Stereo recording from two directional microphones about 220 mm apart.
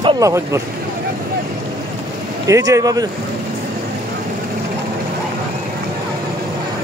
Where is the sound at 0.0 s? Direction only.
15° right (ahead or behind).